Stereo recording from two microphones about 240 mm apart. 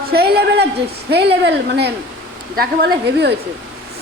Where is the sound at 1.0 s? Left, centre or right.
Right.